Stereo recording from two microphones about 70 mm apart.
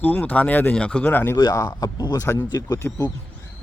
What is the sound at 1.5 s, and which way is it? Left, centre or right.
Speech, left.